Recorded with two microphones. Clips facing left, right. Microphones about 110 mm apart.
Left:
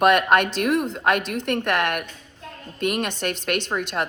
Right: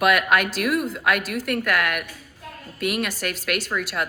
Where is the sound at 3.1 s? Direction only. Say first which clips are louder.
Left 2 dB; 30° left (ahead or behind).